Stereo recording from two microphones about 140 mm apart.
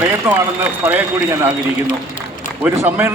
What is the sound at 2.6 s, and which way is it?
Speech, 15° right (ahead or behind).